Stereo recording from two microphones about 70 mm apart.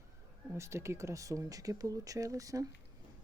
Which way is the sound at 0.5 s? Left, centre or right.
Right.